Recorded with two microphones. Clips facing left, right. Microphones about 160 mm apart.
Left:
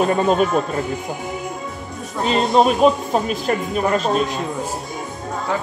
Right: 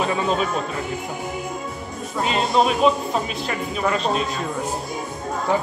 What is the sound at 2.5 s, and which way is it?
Speech, 45° left (ahead or behind).